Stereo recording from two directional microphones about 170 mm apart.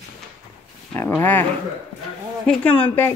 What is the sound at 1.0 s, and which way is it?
Speech, 10° left (ahead or behind).